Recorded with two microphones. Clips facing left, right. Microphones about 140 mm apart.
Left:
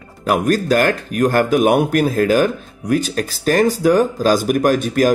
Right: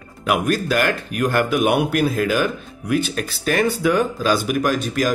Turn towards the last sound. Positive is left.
turn(degrees=50)  # may be behind; listen again after turning